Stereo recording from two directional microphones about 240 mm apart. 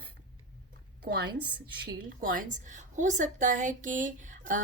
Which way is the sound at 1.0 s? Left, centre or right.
Right.